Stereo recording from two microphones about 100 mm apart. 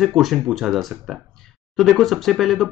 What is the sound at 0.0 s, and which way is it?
Speech, centre (ahead or behind).